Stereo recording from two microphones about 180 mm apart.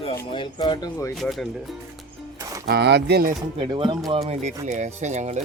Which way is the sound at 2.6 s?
65° right (ahead or behind).